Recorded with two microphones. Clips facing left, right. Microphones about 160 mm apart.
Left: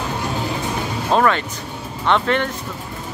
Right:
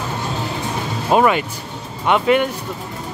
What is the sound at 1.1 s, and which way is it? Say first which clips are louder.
Speech: right 2 dB; 10° right (ahead or behind).